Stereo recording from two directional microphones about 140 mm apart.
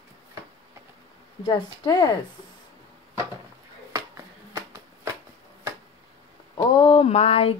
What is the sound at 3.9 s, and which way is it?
Finger snapping, 20° right (ahead or behind).